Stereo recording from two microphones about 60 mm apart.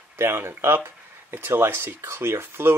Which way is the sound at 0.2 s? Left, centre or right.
Right.